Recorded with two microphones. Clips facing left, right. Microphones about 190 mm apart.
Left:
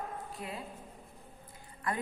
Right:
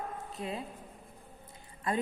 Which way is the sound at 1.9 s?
25° right (ahead or behind).